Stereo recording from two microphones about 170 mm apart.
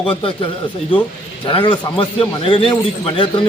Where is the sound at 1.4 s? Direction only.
30° left (ahead or behind).